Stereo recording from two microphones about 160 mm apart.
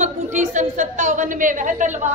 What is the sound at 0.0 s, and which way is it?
A woman's voice, 50° right (ahead or behind).